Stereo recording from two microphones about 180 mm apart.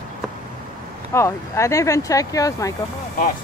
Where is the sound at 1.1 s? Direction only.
15° left (ahead or behind).